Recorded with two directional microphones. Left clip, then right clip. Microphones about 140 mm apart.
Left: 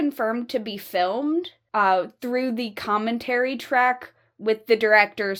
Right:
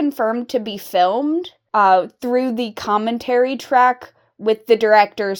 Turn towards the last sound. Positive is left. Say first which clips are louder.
# right 5 dB
turn(degrees=-35)  # may be behind; listen again after turning